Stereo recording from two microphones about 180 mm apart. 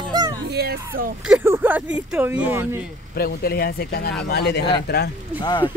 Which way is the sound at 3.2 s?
55° left (ahead or behind).